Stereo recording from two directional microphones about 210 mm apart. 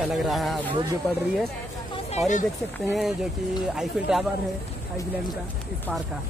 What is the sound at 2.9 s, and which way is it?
A woman's voice, centre (ahead or behind).